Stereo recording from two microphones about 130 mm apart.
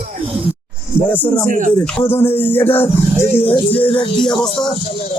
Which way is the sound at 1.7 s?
15° left (ahead or behind).